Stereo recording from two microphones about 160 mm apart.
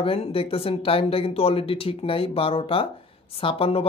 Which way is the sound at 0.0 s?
35° left (ahead or behind).